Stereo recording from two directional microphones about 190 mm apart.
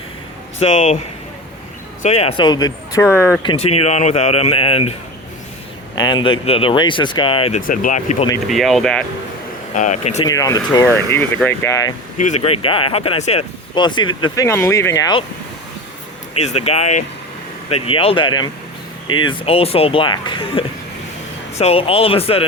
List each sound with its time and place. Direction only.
0.6 s speech: 35° left (ahead or behind)
2.0 s speech: 35° left (ahead or behind); by 3.4 s 10° left (ahead or behind)
3.4 s speech: 30° left (ahead or behind)
6.0 s speech: 25° left (ahead or behind)
7.6 s speech: 45° left (ahead or behind)
8.4 s speech: centre (ahead or behind)
9.7 s speech: 40° left (ahead or behind)
10.2 s speech: 20° left (ahead or behind)
12.1 s speech: 40° left (ahead or behind)
13.7 s speech: 25° left (ahead or behind)
16.3 s speech: 35° left (ahead or behind)